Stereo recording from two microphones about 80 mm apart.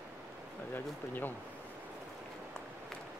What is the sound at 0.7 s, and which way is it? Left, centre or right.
Speech, left.